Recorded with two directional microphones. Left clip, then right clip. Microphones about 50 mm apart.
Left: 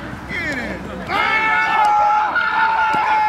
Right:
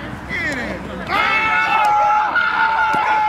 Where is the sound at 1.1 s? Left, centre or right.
Centre.